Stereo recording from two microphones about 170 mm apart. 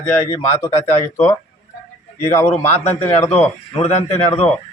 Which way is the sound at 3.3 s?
40° left (ahead or behind).